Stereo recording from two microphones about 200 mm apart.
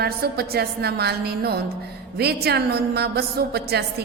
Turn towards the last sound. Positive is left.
turn(degrees=-55)  # may be behind; listen again after turning